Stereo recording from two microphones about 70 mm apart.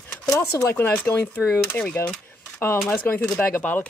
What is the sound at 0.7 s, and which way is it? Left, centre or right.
Speech, left.